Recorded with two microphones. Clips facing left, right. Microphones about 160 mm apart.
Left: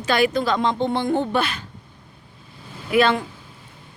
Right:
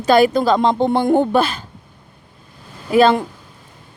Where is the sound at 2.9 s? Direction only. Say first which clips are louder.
Right 5 dB; 40° right (ahead or behind).